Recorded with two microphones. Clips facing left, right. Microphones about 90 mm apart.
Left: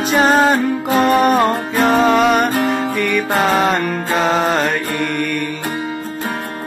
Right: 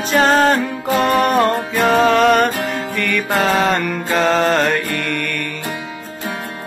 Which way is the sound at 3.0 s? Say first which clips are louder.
Right 2 dB; 5° left (ahead or behind).